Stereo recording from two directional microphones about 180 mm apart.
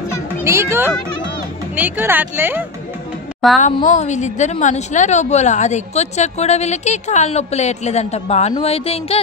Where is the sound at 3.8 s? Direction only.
40° left (ahead or behind).